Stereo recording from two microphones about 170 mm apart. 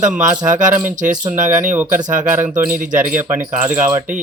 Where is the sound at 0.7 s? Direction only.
10° right (ahead or behind).